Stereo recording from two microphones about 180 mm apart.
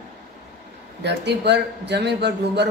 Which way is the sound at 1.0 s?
70° right (ahead or behind).